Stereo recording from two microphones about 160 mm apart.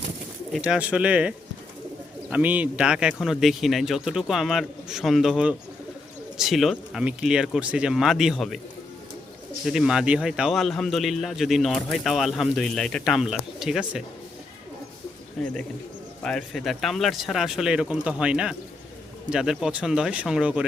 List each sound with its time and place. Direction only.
0.5 s speech: 5° right (ahead or behind)
2.3 s a man's voice: 10° right (ahead or behind)
9.6 s a man's voice: 5° right (ahead or behind)
15.4 s a man's voice: centre (ahead or behind)